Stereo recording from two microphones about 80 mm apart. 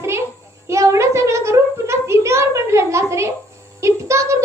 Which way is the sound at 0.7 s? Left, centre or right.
Right.